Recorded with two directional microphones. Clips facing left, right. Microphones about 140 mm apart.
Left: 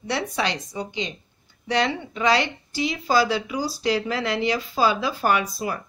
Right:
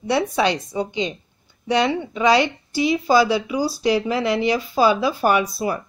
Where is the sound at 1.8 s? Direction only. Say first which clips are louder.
Right 3 dB; 15° right (ahead or behind).